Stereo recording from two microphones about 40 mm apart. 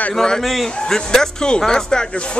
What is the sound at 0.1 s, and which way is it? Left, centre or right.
Speech, centre.